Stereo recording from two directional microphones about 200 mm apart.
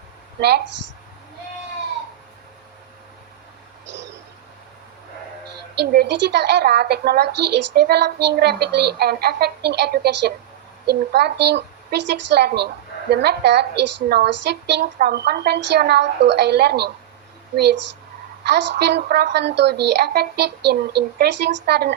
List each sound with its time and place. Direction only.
0.3 s a woman's voice: 55° right (ahead or behind)
3.8 s a sound: 60° right (ahead or behind)
5.7 s a woman's voice: 55° right (ahead or behind)
18.4 s a woman's voice: 60° right (ahead or behind)